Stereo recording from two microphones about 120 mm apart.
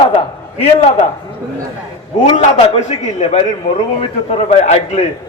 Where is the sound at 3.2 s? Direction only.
65° left (ahead or behind).